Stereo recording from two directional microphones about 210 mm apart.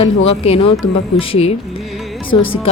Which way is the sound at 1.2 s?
30° left (ahead or behind).